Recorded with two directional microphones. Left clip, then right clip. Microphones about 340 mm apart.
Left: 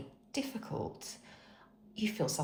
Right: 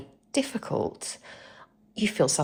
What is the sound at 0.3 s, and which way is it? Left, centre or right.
Speech, right.